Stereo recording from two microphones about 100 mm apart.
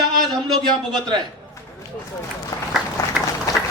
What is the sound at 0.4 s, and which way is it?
Speech, 45° right (ahead or behind).